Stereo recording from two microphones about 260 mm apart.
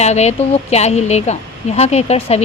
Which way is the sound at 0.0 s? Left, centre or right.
Left.